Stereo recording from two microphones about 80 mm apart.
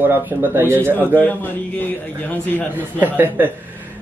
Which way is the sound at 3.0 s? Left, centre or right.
Right.